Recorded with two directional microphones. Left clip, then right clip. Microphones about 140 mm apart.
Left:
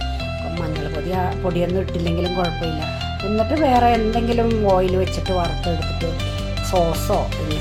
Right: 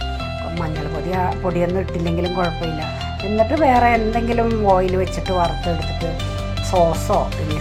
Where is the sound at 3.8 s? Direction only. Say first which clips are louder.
Right 1 dB; 25° left (ahead or behind).